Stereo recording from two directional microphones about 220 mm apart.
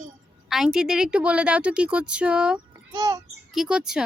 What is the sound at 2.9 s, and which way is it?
Speech, 15° right (ahead or behind).